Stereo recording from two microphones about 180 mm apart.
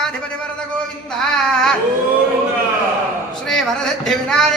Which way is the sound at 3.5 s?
Centre (ahead or behind).